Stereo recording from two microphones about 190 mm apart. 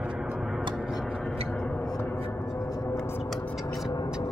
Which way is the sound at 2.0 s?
10° left (ahead or behind).